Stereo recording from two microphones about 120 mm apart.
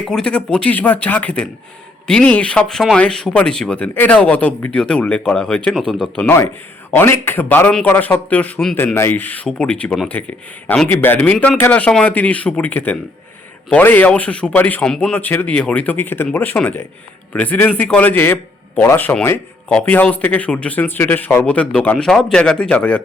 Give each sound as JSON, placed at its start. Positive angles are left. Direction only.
{"t": 0.0, "sound": "speech", "side_deg": 5}
{"t": 6.2, "sound": "speech", "side_deg": 20}